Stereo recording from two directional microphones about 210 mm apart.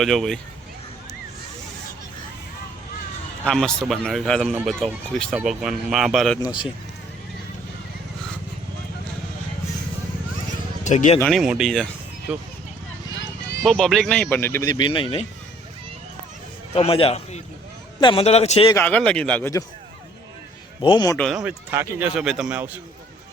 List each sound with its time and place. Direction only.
0.0 s speech: centre (ahead or behind)
3.4 s speech: centre (ahead or behind)
6.4 s a man's voice: 20° left (ahead or behind)
10.8 s speech: 35° left (ahead or behind)
11.2 s speech: centre (ahead or behind)
13.7 s speech: centre (ahead or behind); by 15.3 s 25° left (ahead or behind)
16.7 s a man's voice: 30° left (ahead or behind)
18.7 s speech: 5° left (ahead or behind)
20.8 s a man's voice: 20° left (ahead or behind)
21.2 s speech: centre (ahead or behind)